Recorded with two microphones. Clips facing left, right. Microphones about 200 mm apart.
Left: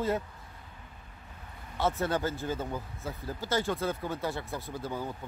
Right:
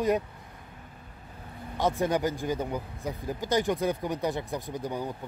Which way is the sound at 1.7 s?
15° right (ahead or behind).